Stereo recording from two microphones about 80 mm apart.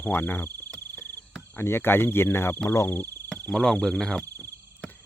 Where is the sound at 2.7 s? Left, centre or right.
Left.